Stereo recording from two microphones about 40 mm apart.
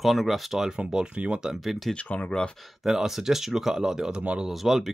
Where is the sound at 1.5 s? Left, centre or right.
Centre.